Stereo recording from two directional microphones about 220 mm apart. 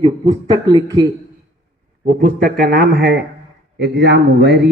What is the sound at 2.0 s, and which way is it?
A man's voice, 40° right (ahead or behind).